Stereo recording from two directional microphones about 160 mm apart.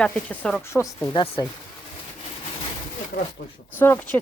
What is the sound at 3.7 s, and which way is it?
Speech, 15° left (ahead or behind).